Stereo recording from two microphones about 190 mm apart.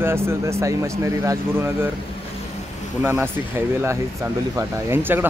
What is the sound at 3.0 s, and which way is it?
Speech, 10° right (ahead or behind).